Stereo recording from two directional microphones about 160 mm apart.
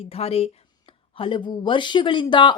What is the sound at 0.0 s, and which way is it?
Speech, 40° left (ahead or behind).